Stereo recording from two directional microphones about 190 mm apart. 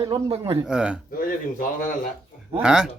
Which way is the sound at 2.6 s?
5° right (ahead or behind).